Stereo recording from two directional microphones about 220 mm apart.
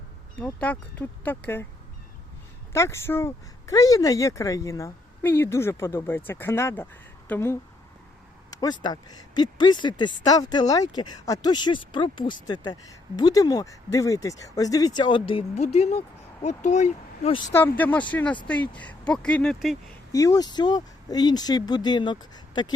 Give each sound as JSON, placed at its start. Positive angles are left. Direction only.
{"t": 0.3, "sound": "speech", "side_deg": 5}
{"t": 2.7, "sound": "speech", "side_deg": 10}
{"t": 17.5, "sound": "speech", "side_deg": 10}
{"t": 20.1, "sound": "speech", "side_deg": 15}